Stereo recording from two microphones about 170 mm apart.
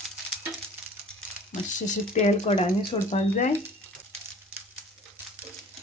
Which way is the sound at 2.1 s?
40° left (ahead or behind).